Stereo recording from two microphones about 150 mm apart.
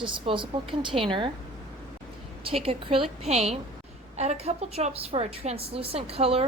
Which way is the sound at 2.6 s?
40° right (ahead or behind).